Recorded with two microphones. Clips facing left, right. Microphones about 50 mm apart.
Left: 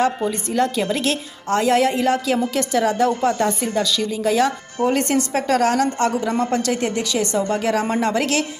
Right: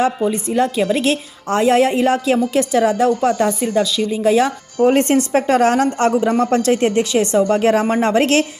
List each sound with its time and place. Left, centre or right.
0.3 s a woman's voice: centre
4.8 s a woman's voice: right